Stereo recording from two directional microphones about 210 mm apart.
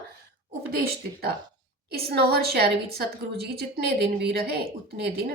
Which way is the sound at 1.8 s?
50° right (ahead or behind).